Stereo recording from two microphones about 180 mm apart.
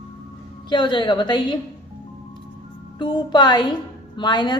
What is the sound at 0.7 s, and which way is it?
Speech, 25° left (ahead or behind).